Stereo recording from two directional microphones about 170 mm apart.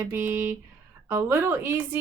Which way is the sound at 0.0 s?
15° right (ahead or behind).